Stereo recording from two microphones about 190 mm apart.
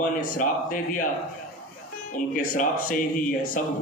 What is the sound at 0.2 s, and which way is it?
Speech, 45° left (ahead or behind).